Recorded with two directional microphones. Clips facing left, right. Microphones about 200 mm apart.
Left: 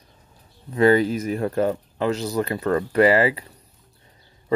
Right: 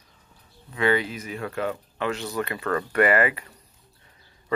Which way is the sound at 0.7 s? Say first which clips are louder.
Left 7 dB; 40° left (ahead or behind).